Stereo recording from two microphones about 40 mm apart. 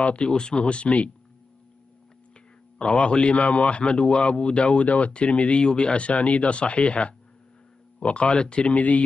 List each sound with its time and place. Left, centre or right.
0.0 s speech: left
2.8 s speech: left